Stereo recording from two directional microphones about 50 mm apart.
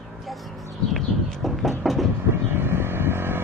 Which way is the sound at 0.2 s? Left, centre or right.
Centre.